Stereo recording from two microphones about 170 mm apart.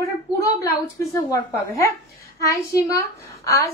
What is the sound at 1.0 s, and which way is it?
A woman's voice, 20° left (ahead or behind).